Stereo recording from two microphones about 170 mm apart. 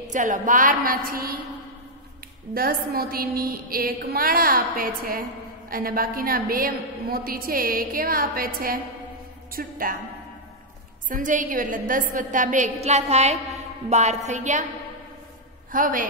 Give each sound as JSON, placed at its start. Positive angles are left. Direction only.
{"t": 0.0, "sound": "a woman's voice", "side_deg": -45}
{"t": 2.5, "sound": "a woman's voice", "side_deg": -65}
{"t": 11.1, "sound": "a woman's voice", "side_deg": -50}
{"t": 15.7, "sound": "a woman's voice", "side_deg": -50}